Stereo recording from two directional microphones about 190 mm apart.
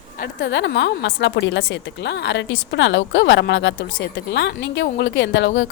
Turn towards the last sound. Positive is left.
turn(degrees=70)  # may be behind; listen again after turning